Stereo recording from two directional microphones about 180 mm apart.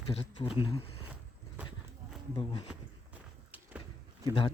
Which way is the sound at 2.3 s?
30° left (ahead or behind).